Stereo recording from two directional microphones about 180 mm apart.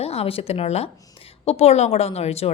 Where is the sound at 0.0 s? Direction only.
35° left (ahead or behind).